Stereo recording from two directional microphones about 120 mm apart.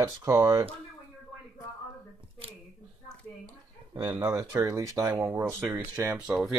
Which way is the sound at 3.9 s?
40° right (ahead or behind).